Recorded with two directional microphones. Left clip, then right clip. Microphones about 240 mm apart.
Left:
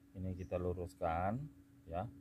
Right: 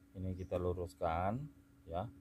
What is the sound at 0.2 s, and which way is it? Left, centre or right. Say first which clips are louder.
Speech: right 2 dB; centre.